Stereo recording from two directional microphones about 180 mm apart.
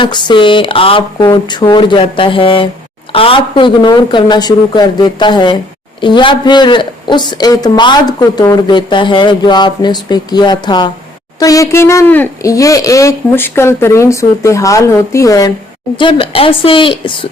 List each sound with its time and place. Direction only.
0.0 s a woman's voice: 25° left (ahead or behind)